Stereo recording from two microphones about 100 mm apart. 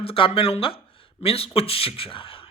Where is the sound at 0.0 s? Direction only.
70° left (ahead or behind).